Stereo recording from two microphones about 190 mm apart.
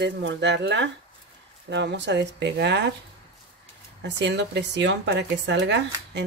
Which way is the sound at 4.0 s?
65° right (ahead or behind).